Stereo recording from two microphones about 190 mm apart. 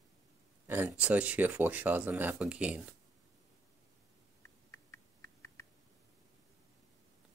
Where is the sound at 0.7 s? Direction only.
10° right (ahead or behind).